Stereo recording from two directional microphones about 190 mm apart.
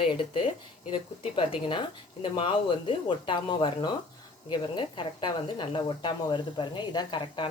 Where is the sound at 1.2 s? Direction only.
25° left (ahead or behind).